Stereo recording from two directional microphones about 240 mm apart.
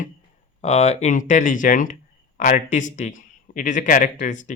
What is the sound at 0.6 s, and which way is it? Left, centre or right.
Speech, left.